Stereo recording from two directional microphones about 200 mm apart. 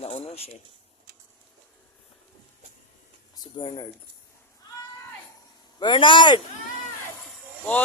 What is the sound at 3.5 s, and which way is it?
Speech, 25° left (ahead or behind).